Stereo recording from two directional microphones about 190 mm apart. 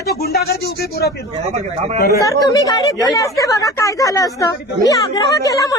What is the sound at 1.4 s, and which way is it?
Speech, 35° right (ahead or behind).